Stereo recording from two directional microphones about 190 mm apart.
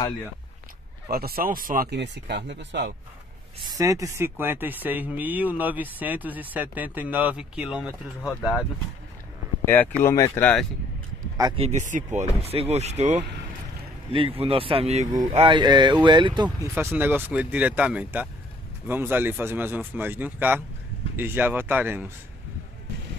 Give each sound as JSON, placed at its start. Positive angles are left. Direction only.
{"t": 1.1, "sound": "speech", "side_deg": -50}
{"t": 3.7, "sound": "speech", "side_deg": -15}
{"t": 9.7, "sound": "speech", "side_deg": 10}
{"t": 11.3, "sound": "speech", "side_deg": -20}
{"t": 11.9, "sound": "speech", "side_deg": -40}
{"t": 15.5, "sound": "speech", "side_deg": -25}
{"t": 16.4, "sound": "speech", "side_deg": -10}